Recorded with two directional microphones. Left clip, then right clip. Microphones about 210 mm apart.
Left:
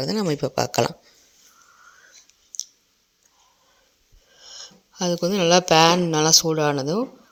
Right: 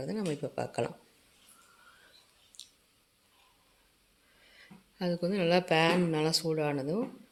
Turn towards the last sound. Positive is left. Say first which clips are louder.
# left 10 dB
turn(degrees=35)  # may be behind; listen again after turning